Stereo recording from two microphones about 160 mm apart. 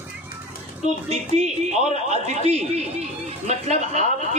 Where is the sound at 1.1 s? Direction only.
45° right (ahead or behind).